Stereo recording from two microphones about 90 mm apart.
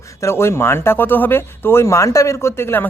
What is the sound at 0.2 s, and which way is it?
Speech, 30° left (ahead or behind).